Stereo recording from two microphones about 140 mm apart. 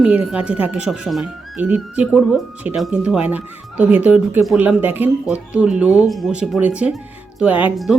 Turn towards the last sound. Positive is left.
turn(degrees=-10)  # may be behind; listen again after turning